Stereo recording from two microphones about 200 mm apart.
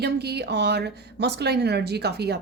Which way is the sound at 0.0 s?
55° right (ahead or behind).